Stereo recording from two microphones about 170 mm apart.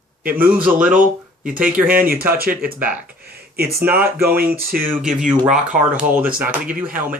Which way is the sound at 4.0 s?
15° right (ahead or behind).